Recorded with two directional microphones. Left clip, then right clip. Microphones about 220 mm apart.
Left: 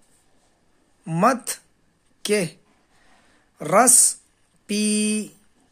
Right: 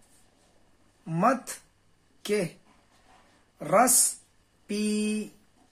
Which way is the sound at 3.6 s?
45° left (ahead or behind).